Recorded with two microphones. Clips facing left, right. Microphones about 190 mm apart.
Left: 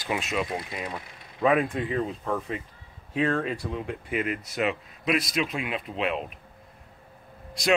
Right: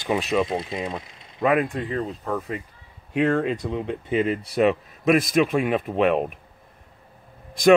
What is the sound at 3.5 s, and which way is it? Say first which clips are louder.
A man's voice: right 5 dB; 20° right (ahead or behind).